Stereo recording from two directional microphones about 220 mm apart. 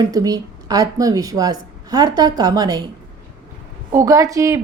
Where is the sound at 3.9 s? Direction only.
15° right (ahead or behind).